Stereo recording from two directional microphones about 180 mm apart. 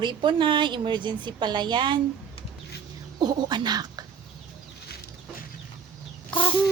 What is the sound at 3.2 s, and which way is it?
Speech, 25° right (ahead or behind).